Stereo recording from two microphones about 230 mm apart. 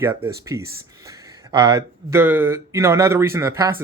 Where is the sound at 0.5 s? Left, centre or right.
Centre.